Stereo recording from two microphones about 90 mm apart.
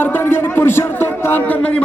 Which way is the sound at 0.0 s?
25° left (ahead or behind).